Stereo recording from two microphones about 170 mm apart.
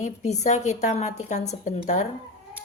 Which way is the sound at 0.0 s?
40° left (ahead or behind).